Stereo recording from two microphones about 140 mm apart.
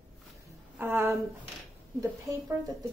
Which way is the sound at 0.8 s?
15° right (ahead or behind).